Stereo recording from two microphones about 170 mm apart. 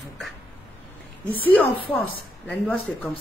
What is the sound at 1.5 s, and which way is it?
Speech, 10° left (ahead or behind).